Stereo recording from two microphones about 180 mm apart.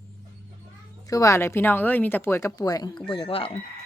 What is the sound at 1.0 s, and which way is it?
Speech, 20° left (ahead or behind).